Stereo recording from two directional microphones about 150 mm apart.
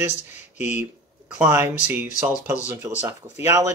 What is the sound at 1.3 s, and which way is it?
Speech, 15° right (ahead or behind).